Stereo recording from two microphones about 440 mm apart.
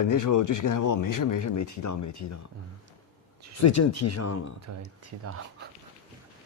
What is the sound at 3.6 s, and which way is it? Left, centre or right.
Speech, left.